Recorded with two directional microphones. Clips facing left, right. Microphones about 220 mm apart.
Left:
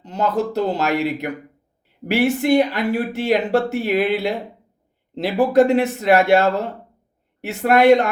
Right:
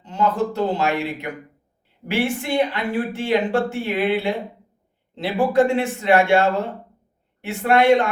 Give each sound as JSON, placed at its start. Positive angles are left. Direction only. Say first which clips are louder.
{"t": 0.0, "sound": "speech", "louder": "even", "side_deg": 40}